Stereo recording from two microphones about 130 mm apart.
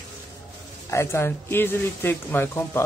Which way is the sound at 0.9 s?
20° left (ahead or behind).